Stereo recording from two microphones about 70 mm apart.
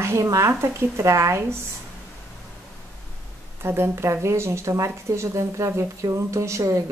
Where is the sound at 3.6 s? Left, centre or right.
Right.